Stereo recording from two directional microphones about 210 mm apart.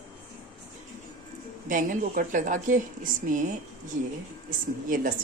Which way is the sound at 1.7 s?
40° right (ahead or behind).